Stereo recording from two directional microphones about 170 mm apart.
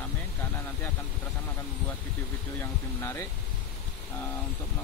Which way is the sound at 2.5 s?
15° left (ahead or behind).